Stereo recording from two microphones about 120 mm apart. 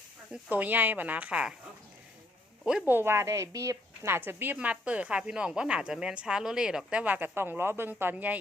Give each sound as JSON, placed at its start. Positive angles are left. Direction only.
{"t": 0.5, "sound": "speech", "side_deg": -15}
{"t": 2.8, "sound": "a woman's voice", "side_deg": -20}